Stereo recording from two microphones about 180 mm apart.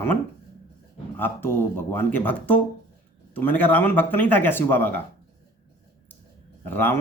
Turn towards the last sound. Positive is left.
turn(degrees=10)  # may be behind; listen again after turning